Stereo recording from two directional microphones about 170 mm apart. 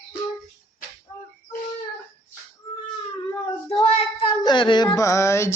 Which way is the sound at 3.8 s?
35° left (ahead or behind).